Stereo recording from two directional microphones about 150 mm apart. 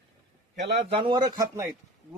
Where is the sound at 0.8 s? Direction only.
30° right (ahead or behind).